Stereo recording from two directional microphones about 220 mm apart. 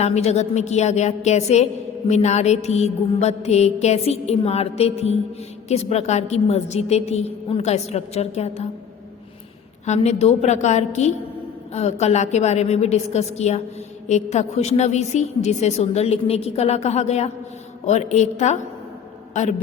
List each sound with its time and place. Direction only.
0.0 s a woman's voice: 30° left (ahead or behind)
9.8 s a woman's voice: 30° left (ahead or behind)